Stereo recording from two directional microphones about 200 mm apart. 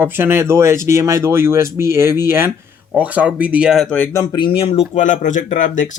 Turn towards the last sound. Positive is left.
turn(degrees=40)  # may be behind; listen again after turning